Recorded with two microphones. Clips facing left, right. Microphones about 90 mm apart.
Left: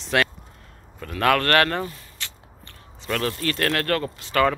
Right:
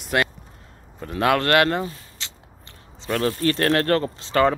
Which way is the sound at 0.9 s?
25° right (ahead or behind).